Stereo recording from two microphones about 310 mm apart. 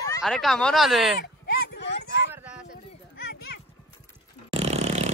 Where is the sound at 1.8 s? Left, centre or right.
Left.